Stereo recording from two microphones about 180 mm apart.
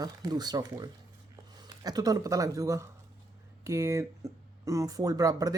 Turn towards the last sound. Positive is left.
turn(degrees=-20)  # may be behind; listen again after turning